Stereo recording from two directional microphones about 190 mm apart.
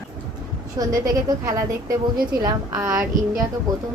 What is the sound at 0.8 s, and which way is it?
Speech, 20° right (ahead or behind).